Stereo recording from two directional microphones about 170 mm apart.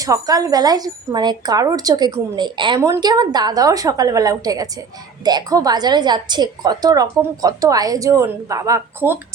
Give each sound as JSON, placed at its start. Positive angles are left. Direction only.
{"t": 0.0, "sound": "a woman's voice", "side_deg": -20}